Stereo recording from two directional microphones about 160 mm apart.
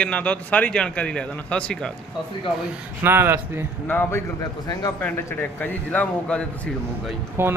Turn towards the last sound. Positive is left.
turn(degrees=-15)  # may be behind; listen again after turning